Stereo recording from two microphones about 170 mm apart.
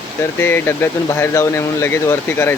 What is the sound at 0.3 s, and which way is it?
Speech, 10° left (ahead or behind).